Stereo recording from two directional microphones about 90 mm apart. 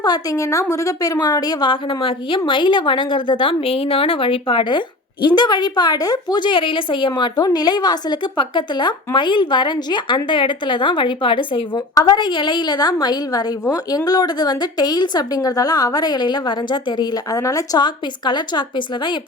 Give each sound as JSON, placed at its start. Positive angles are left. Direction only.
{"t": 0.0, "sound": "a woman's voice", "side_deg": 45}
{"t": 1.7, "sound": "a woman's voice", "side_deg": 70}
{"t": 5.2, "sound": "a woman's voice", "side_deg": 55}
{"t": 7.3, "sound": "a woman's voice", "side_deg": 50}
{"t": 11.9, "sound": "a woman's voice", "side_deg": 50}
{"t": 17.4, "sound": "a woman's voice", "side_deg": 40}